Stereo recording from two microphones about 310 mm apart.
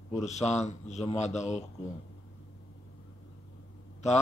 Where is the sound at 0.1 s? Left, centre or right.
Left.